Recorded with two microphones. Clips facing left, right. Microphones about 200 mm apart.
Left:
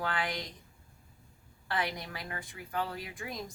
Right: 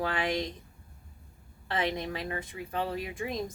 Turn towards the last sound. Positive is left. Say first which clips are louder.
# right 7 dB
turn(degrees=-20)  # may be behind; listen again after turning